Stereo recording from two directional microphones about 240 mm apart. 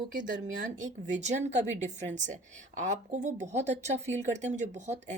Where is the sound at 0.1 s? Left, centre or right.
Right.